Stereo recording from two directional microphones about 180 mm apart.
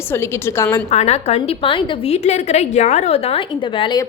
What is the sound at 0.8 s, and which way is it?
A woman's voice, 35° left (ahead or behind).